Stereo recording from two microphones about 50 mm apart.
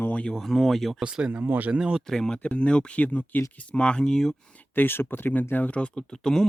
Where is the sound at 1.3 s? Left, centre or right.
Right.